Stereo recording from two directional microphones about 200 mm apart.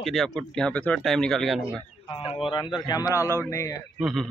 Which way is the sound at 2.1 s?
25° left (ahead or behind).